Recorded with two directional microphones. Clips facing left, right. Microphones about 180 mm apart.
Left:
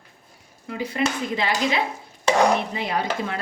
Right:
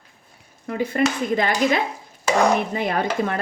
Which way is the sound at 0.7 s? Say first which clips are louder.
Right 4 dB; 50° right (ahead or behind).